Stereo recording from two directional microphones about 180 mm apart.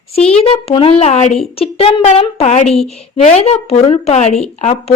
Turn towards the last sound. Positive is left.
turn(degrees=35)  # may be behind; listen again after turning